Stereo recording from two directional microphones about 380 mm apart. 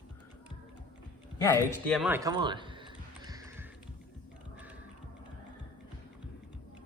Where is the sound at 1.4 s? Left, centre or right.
Centre.